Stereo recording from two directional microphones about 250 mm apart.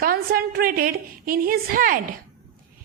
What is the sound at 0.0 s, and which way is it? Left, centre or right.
A woman's voice, right.